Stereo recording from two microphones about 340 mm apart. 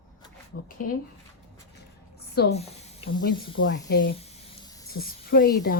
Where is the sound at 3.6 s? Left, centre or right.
Left.